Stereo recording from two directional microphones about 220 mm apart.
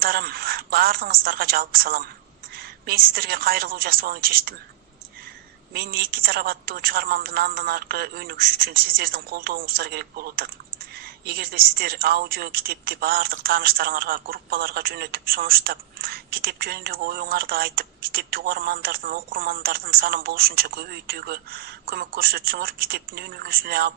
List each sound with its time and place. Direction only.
0.0 s a woman's voice: 40° right (ahead or behind)
5.7 s a woman's voice: 45° right (ahead or behind)